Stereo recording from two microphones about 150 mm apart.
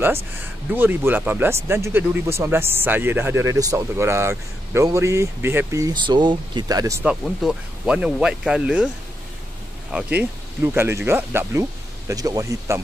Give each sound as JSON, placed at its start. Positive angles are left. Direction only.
{"t": 0.0, "sound": "speech", "side_deg": -15}
{"t": 6.0, "sound": "speech", "side_deg": -30}
{"t": 7.1, "sound": "speech", "side_deg": -5}
{"t": 10.1, "sound": "speech", "side_deg": -15}